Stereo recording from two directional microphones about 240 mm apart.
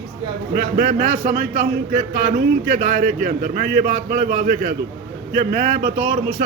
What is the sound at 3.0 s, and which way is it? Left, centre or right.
A man's voice, right.